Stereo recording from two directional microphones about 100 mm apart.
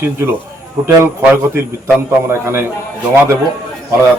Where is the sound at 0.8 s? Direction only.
25° right (ahead or behind).